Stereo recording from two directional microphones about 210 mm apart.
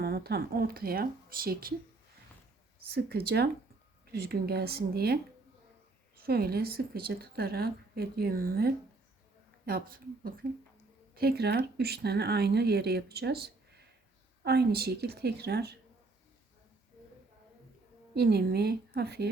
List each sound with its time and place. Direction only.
0.0 s speech: 50° right (ahead or behind)
2.9 s speech: 45° right (ahead or behind)
6.2 s speech: 45° right (ahead or behind)
18.1 s speech: 50° right (ahead or behind)